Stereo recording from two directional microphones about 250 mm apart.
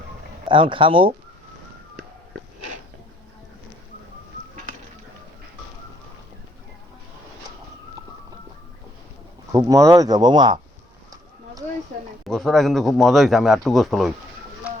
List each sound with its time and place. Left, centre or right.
0.4 s speech: centre
9.5 s speech: centre
12.2 s speech: centre